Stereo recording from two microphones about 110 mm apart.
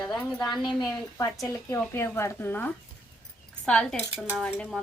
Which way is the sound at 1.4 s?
25° left (ahead or behind).